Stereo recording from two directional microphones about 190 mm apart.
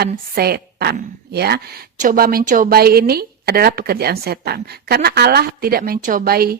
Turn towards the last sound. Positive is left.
turn(degrees=-55)  # may be behind; listen again after turning